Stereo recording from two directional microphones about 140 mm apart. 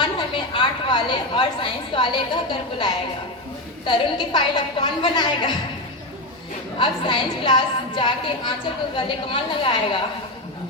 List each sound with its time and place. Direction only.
0.0 s a woman's voice: 35° left (ahead or behind)
6.7 s a woman's voice: 35° left (ahead or behind)